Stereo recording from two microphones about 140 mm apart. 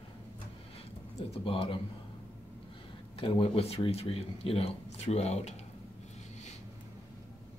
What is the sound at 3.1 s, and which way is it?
Speech, 40° left (ahead or behind).